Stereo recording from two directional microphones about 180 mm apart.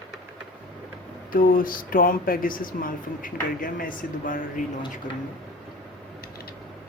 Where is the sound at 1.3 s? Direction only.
50° left (ahead or behind).